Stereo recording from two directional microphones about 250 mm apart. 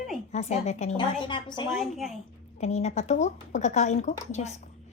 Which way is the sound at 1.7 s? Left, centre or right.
Centre.